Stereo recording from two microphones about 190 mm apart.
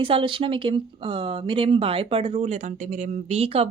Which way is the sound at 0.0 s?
25° right (ahead or behind).